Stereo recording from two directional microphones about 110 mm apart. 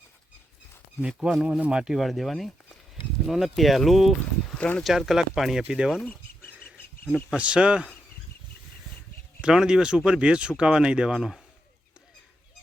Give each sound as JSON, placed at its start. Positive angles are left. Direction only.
{"t": 1.0, "sound": "speech", "side_deg": -5}
{"t": 4.5, "sound": "speech", "side_deg": 10}
{"t": 4.8, "sound": "speech", "side_deg": 0}
{"t": 6.1, "sound": "a sound", "side_deg": 20}
{"t": 7.3, "sound": "speech", "side_deg": -10}
{"t": 9.4, "sound": "speech", "side_deg": -5}